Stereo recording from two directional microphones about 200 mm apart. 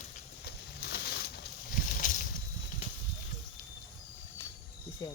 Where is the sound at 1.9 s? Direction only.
45° left (ahead or behind).